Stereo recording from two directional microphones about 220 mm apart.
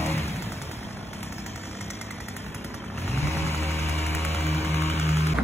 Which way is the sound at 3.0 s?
30° left (ahead or behind).